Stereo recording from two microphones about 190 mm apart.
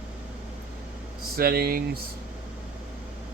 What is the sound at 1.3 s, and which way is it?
Speech, 55° right (ahead or behind).